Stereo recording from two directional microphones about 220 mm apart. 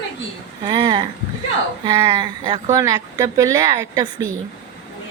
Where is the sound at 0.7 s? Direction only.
20° right (ahead or behind).